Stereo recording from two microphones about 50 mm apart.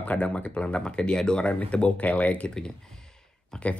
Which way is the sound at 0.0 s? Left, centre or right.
Left.